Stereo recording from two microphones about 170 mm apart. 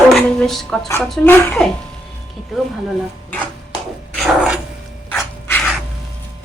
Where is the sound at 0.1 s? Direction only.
Centre (ahead or behind).